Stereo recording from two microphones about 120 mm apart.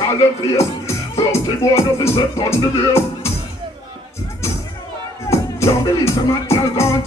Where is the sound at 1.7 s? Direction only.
25° left (ahead or behind).